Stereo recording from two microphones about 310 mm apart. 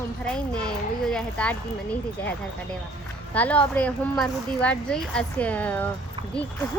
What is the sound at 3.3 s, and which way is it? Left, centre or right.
A woman's voice, centre.